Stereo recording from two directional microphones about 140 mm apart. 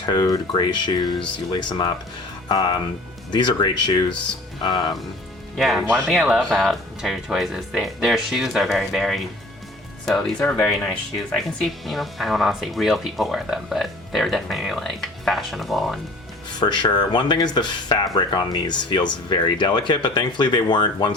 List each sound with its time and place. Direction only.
0.0 s speech: 30° left (ahead or behind)
5.5 s speech: centre (ahead or behind)
16.5 s speech: 30° left (ahead or behind)